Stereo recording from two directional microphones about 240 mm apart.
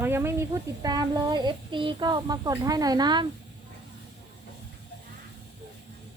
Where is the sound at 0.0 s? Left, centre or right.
Centre.